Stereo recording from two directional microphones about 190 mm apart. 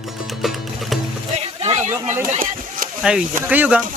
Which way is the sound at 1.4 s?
35° right (ahead or behind).